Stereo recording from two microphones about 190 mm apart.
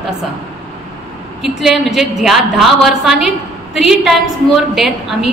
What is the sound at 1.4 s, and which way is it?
A woman's voice, centre (ahead or behind).